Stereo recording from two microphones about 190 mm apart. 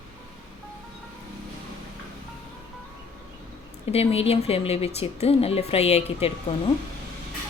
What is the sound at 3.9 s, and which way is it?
A woman's voice, 30° left (ahead or behind).